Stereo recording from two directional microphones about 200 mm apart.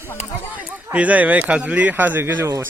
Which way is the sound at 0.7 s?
5° right (ahead or behind).